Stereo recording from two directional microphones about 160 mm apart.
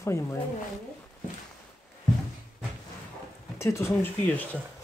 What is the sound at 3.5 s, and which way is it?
Speech, 15° left (ahead or behind).